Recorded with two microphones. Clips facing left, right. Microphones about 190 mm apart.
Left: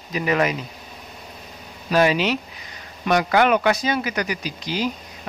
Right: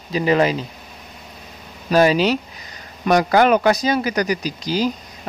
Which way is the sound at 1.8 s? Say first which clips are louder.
Right 4 dB; 40° right (ahead or behind).